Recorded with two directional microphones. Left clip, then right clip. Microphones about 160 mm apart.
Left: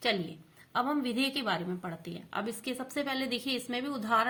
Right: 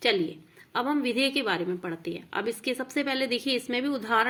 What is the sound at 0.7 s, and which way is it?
A woman's voice, 15° right (ahead or behind).